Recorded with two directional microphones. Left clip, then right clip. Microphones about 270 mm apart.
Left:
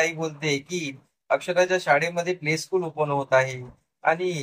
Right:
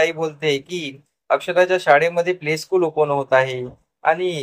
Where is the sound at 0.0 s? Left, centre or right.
Right.